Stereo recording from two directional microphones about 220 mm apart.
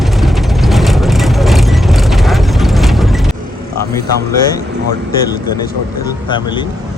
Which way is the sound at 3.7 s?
15° left (ahead or behind).